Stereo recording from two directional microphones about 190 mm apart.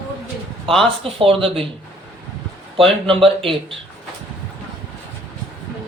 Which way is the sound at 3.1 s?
30° right (ahead or behind).